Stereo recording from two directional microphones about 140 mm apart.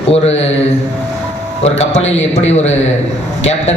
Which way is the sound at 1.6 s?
50° left (ahead or behind).